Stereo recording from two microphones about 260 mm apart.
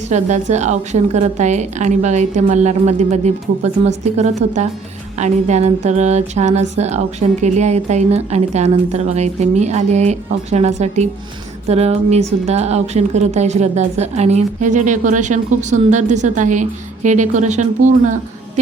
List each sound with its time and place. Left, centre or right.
0.1 s speech: right